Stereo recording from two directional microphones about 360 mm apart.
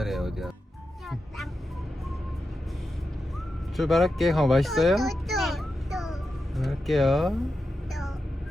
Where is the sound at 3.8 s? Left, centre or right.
Centre.